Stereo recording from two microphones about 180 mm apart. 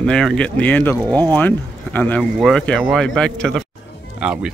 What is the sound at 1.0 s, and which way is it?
Speech, 20° right (ahead or behind).